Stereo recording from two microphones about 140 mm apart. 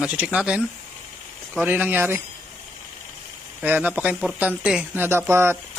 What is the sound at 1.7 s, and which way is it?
Speech, 15° right (ahead or behind).